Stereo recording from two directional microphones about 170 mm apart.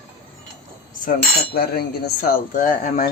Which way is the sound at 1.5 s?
65° left (ahead or behind).